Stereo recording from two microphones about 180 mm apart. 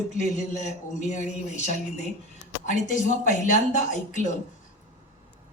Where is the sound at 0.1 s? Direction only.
40° left (ahead or behind).